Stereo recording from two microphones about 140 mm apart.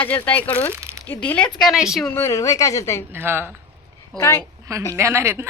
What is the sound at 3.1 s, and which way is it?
Speech, 15° right (ahead or behind).